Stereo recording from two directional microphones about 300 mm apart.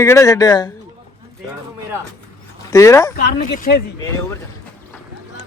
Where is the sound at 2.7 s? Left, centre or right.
Centre.